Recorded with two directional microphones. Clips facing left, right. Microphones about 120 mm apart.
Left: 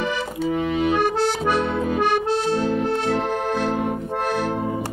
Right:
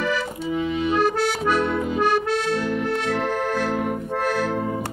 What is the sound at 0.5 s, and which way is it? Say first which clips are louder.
Music: left 2 dB; 55° left (ahead or behind).